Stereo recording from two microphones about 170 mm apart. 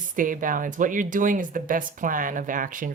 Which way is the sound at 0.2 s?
50° right (ahead or behind).